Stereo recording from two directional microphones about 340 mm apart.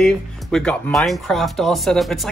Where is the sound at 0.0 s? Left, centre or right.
Centre.